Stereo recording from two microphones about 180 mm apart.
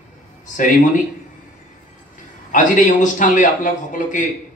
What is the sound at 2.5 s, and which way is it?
A man's voice, 45° left (ahead or behind).